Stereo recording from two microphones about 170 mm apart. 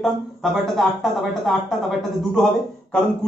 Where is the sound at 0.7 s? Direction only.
Centre (ahead or behind).